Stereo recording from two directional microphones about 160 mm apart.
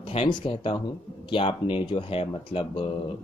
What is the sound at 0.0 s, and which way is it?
Speech, 35° left (ahead or behind).